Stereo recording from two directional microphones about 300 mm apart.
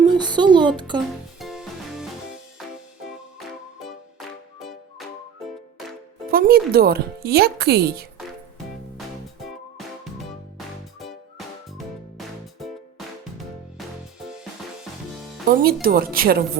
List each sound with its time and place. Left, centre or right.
0.0 s speech: centre
1.4 s music: centre
6.3 s speech: right
9.4 s music: centre
15.6 s speech: right